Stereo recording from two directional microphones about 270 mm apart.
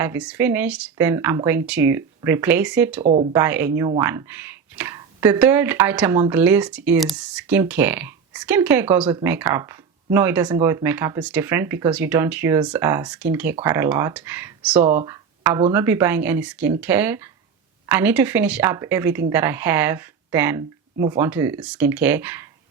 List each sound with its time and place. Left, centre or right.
0.0 s speech: centre
3.0 s speech: right
3.3 s speech: centre